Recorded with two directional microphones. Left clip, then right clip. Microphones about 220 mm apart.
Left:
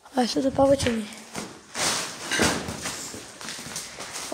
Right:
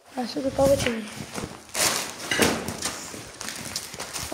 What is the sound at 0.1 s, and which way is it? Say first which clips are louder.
Speech: left 4 dB; 35° left (ahead or behind).